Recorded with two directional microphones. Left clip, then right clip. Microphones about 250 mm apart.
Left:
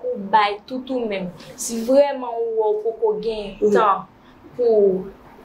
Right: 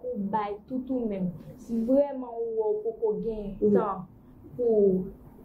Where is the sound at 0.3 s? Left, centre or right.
Centre.